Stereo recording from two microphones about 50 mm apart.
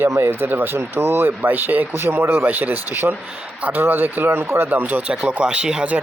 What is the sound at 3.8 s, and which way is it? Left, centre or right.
Speech, right.